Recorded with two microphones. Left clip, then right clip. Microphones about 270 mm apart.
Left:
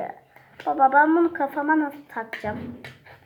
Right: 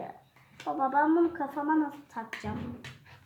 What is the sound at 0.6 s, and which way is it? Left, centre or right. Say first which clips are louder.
A woman's voice: left 10 dB; centre.